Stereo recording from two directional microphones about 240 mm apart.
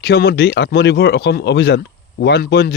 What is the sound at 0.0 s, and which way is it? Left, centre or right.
Speech, left.